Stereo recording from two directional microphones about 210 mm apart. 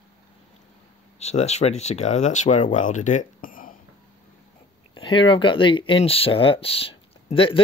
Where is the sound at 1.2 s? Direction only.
30° left (ahead or behind).